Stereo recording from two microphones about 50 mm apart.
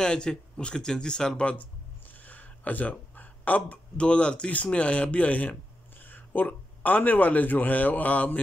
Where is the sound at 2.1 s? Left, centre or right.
Left.